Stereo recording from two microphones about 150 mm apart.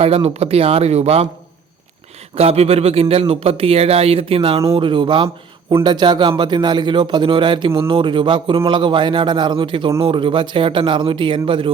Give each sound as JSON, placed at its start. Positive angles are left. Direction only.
{"t": 0.0, "sound": "speech", "side_deg": -40}
{"t": 2.3, "sound": "speech", "side_deg": -45}